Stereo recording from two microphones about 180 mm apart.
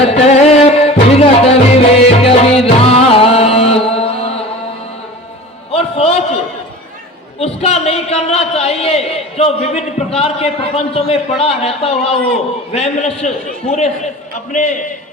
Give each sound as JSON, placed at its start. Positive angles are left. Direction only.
{"t": 0.0, "sound": "music", "side_deg": 35}
{"t": 5.7, "sound": "a sound", "side_deg": 35}
{"t": 7.3, "sound": "a man's voice", "side_deg": 35}